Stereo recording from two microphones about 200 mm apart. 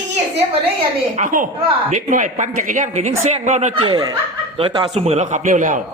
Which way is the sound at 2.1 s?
40° right (ahead or behind).